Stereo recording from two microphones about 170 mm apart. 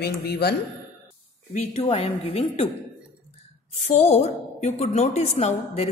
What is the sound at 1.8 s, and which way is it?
Speech, 30° left (ahead or behind).